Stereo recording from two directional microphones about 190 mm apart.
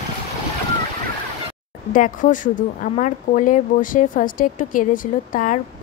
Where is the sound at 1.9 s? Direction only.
45° left (ahead or behind).